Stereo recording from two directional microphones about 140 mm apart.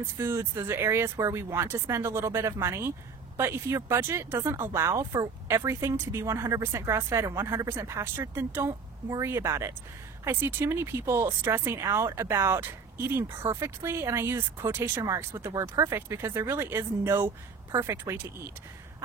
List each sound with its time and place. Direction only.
0.0 s speech: 20° right (ahead or behind)